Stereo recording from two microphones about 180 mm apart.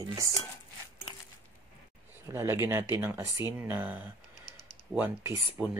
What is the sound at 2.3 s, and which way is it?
Speech, 15° right (ahead or behind).